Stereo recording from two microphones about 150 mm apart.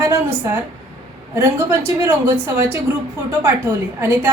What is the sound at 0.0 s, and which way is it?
Speech, 15° right (ahead or behind).